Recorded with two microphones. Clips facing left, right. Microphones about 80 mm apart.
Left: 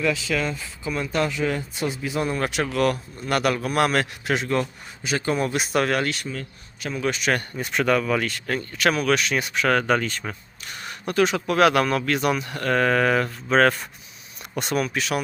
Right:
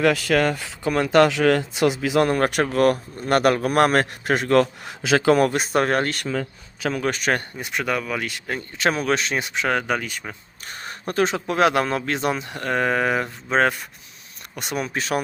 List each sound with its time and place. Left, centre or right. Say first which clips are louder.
0.0 s speech: right 5 dB; right
4.4 s a man's voice: right 7 dB; right
5.5 s speech: right 2 dB; right
7.6 s speech: left 4 dB; centre
8.8 s speech: even; right; by 10.3 s centre
10.7 s speech: even; right; by 13.7 s centre
14.5 s speech: left 4 dB; centre
14.8 s speech: right 1 dB; right